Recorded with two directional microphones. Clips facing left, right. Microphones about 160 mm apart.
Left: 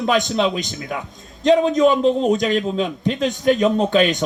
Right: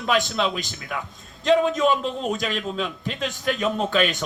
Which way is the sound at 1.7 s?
40° left (ahead or behind).